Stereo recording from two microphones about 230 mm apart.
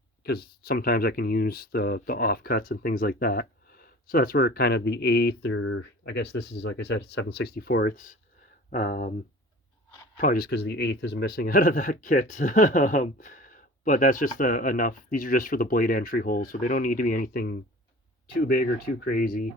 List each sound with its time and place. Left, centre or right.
0.2 s speech: left
6.1 s speech: left
10.2 s speech: left